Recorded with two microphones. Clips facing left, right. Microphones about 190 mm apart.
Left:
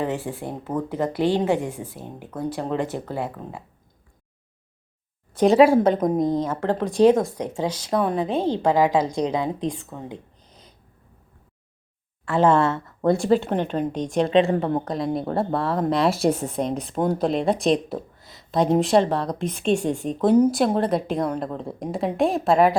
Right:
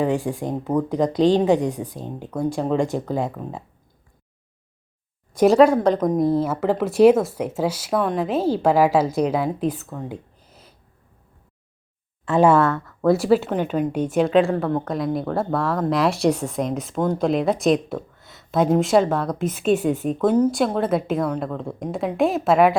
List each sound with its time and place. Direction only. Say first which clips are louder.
0.0 s speech: right 5 dB; 15° right (ahead or behind)
5.5 s speech: even; 5° left (ahead or behind)
12.2 s speech: right 2 dB; 15° right (ahead or behind)
13.1 s speech: right 2 dB; 5° right (ahead or behind)
14.4 s a woman's voice: even; 20° left (ahead or behind)
15.3 s speech: right 1 dB; centre (ahead or behind)